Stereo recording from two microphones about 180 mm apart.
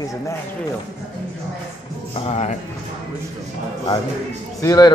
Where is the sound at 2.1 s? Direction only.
35° left (ahead or behind).